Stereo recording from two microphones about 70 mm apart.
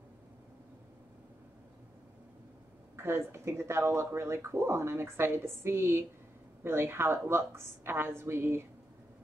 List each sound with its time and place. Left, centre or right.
3.0 s speech: right